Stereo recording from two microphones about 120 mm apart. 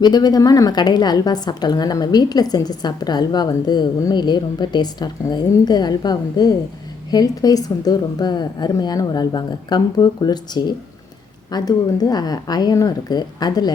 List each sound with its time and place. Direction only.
0.0 s a woman's voice: 35° left (ahead or behind)